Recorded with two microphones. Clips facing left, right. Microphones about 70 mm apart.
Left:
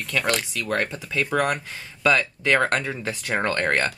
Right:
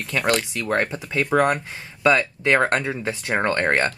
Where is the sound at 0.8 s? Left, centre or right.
Centre.